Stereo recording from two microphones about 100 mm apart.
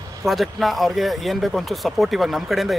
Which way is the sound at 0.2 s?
Centre (ahead or behind).